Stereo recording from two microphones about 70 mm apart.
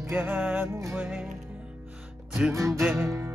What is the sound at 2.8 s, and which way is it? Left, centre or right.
Music, right.